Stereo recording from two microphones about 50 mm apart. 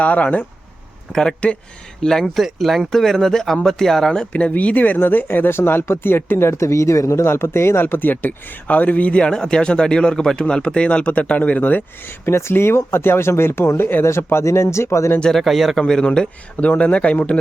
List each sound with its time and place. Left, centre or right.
0.0 s speech: left
1.1 s speech: centre
4.3 s speech: left
6.6 s speech: left
7.9 s speech: left
9.3 s speech: centre; by 11.8 s left
12.2 s speech: left
14.4 s speech: left
15.3 s speech: centre
16.0 s speech: left